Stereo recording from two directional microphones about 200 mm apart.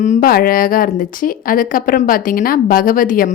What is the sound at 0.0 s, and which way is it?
A woman's voice, 40° left (ahead or behind).